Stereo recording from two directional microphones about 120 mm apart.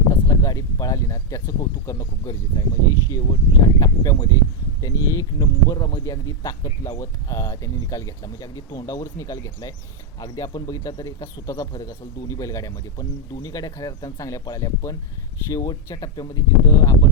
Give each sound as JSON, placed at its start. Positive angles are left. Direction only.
{"t": 0.1, "sound": "speech", "side_deg": 30}